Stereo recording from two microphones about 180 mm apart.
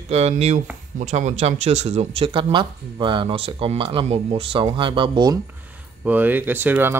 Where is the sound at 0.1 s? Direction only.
35° right (ahead or behind).